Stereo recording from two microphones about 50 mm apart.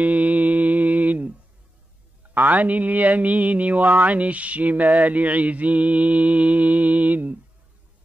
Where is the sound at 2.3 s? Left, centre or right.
Right.